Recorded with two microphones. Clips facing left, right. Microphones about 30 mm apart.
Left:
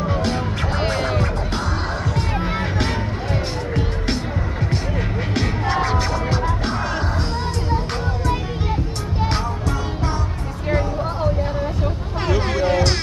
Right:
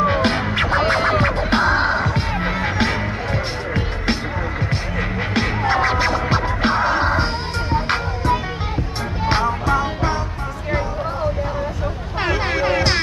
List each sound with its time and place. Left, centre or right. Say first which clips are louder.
0.0 s music: right 5 dB; right
9.3 s music: right 6 dB; right
12.2 s music: right 1 dB; right